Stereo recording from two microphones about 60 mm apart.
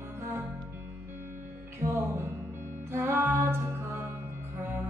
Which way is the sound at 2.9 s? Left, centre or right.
Right.